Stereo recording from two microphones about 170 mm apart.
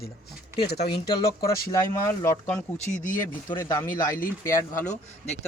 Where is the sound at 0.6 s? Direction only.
70° left (ahead or behind).